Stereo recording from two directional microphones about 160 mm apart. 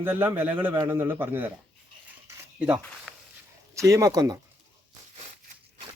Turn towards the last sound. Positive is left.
turn(degrees=-25)  # may be behind; listen again after turning